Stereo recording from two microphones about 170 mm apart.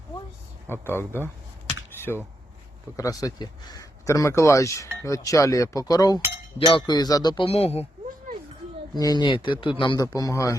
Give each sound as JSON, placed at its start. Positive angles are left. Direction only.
{"t": 0.7, "sound": "speech", "side_deg": 15}
{"t": 2.9, "sound": "speech", "side_deg": 20}
{"t": 9.0, "sound": "speech", "side_deg": 25}